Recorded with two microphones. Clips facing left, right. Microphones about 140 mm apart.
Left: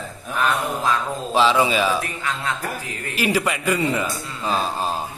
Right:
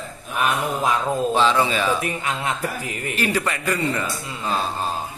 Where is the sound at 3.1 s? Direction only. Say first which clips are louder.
Left 3 dB; 10° left (ahead or behind).